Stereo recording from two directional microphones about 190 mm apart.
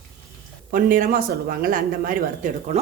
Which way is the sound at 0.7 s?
45° right (ahead or behind).